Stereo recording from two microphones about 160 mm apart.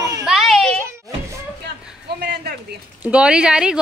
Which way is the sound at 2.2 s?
90° right.